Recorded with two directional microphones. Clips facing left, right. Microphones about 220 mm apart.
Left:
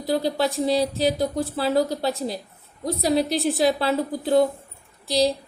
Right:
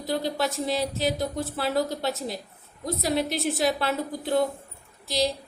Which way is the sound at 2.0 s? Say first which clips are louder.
Left 4 dB; centre (ahead or behind).